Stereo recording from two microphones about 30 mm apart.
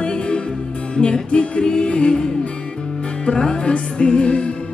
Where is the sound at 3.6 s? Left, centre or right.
Left.